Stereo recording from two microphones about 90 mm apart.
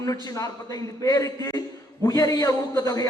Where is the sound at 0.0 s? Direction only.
40° left (ahead or behind).